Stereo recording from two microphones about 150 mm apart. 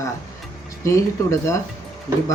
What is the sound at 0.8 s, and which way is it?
Speech, 20° left (ahead or behind).